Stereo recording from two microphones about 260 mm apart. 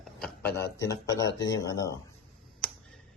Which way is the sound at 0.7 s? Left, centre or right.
Centre.